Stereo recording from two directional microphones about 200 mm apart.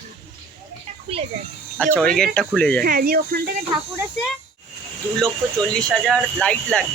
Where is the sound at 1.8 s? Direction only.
5° left (ahead or behind).